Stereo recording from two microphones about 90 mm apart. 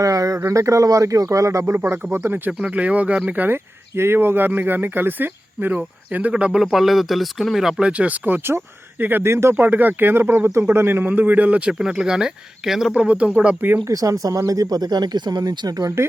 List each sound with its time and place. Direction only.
0.0 s speech: 40° right (ahead or behind)
2.5 s speech: 15° right (ahead or behind)
13.8 s speech: 40° right (ahead or behind)